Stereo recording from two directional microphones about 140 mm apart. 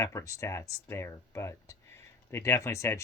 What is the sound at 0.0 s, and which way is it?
Speech, 20° left (ahead or behind).